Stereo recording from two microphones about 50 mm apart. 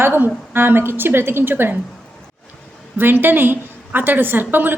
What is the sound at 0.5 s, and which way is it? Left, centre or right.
A woman's voice, right.